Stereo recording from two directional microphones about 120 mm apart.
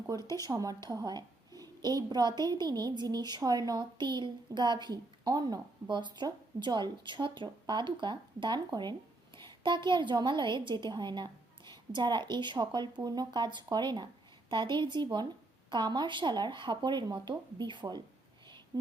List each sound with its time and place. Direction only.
0.3 s a child's voice: 30° right (ahead or behind)